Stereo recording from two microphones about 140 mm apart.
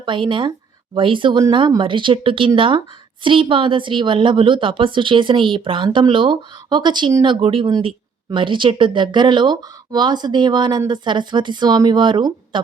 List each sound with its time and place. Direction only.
0.0 s speech: 35° right (ahead or behind)